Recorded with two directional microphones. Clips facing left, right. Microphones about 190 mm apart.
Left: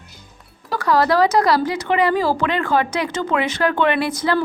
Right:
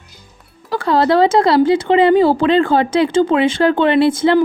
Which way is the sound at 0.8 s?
25° right (ahead or behind).